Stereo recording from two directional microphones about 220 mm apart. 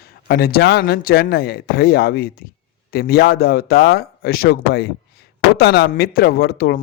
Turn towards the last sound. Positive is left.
turn(degrees=45)  # may be behind; listen again after turning